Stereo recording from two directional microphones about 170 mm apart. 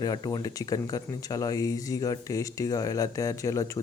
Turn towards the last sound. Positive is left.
turn(degrees=20)  # may be behind; listen again after turning